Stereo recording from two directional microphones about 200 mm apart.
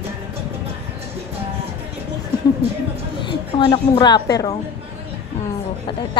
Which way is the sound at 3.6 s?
25° left (ahead or behind).